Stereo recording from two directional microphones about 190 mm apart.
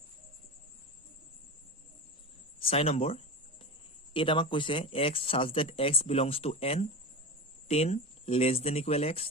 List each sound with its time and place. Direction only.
2.6 s cricket: 30° left (ahead or behind)
4.1 s speech: 25° left (ahead or behind)